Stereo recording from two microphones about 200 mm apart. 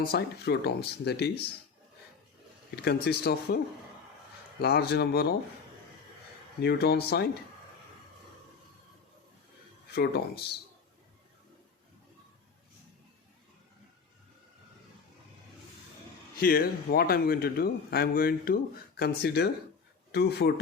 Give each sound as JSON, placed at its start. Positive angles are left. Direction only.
{"t": 0.0, "sound": "a man's voice", "side_deg": 50}
{"t": 2.7, "sound": "a man's voice", "side_deg": 50}
{"t": 4.6, "sound": "a man's voice", "side_deg": 50}
{"t": 6.6, "sound": "a man's voice", "side_deg": 55}
{"t": 9.9, "sound": "speech", "side_deg": 55}
{"t": 16.4, "sound": "a man's voice", "side_deg": 45}